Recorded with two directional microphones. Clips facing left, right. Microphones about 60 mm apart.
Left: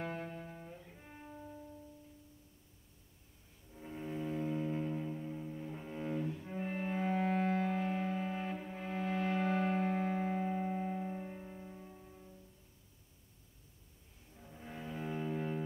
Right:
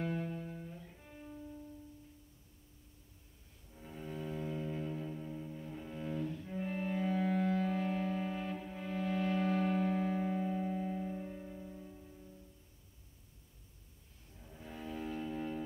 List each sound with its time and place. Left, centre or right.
0.0 s music: left
3.8 s cello: left
14.6 s cello: left